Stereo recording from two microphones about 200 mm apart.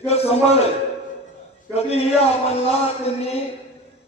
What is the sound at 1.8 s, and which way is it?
A man's voice, 30° left (ahead or behind).